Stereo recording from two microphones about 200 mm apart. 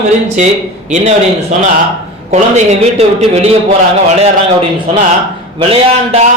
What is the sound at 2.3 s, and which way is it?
A man's voice, 35° right (ahead or behind).